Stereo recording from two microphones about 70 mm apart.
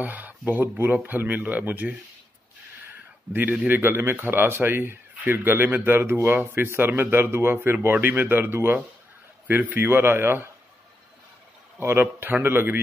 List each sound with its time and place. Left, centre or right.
0.0 s speech: right
3.3 s a man's voice: right
11.8 s a man's voice: right